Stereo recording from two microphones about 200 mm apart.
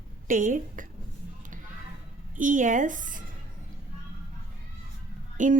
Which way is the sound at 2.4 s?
40° right (ahead or behind).